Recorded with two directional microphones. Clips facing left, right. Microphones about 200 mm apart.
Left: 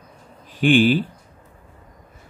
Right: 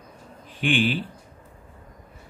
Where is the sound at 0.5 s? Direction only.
40° left (ahead or behind).